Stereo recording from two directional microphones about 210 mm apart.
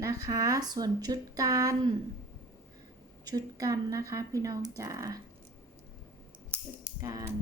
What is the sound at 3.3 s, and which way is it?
Speech, 15° right (ahead or behind).